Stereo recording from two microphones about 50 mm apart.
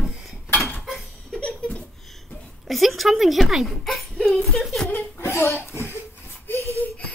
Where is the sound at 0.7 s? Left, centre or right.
Centre.